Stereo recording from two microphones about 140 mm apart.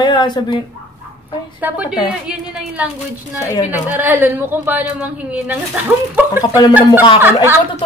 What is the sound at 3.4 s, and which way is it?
Speech, 20° left (ahead or behind).